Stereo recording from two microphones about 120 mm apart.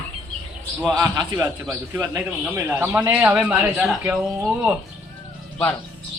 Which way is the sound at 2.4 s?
15° right (ahead or behind).